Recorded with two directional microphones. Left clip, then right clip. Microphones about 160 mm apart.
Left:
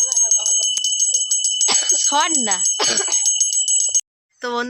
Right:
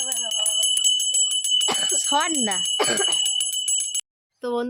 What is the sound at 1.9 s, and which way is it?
Speech, 15° right (ahead or behind).